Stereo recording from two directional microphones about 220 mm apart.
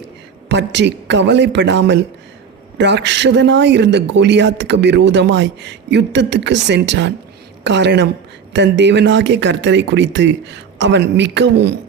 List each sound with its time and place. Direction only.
0.4 s speech: 50° right (ahead or behind)